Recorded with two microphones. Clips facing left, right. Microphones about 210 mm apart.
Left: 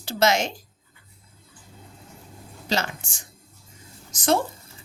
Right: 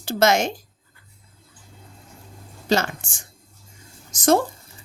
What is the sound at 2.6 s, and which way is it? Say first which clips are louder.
A woman's voice: right 5 dB; 50° right (ahead or behind).